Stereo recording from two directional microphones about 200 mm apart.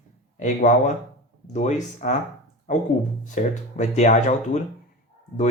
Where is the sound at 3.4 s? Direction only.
35° left (ahead or behind).